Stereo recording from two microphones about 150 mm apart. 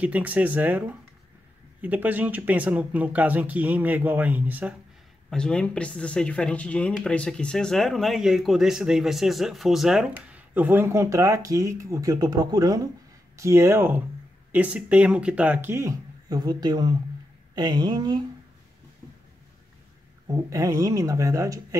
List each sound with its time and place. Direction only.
0.0 s speech: 10° right (ahead or behind)
5.3 s speech: 5° left (ahead or behind); by 18.2 s 30° right (ahead or behind)
20.2 s speech: 20° right (ahead or behind)